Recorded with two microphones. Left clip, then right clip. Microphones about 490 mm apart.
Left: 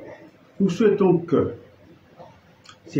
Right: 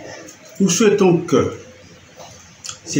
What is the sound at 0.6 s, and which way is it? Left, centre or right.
Speech, left.